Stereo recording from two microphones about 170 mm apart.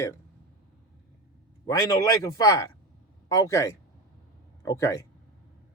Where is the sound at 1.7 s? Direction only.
20° left (ahead or behind).